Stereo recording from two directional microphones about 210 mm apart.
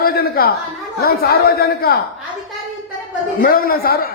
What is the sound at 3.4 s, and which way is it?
Speech, 45° left (ahead or behind).